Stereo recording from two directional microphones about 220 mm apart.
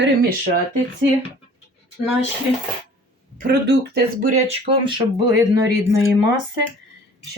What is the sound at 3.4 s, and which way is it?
Speech, 50° right (ahead or behind).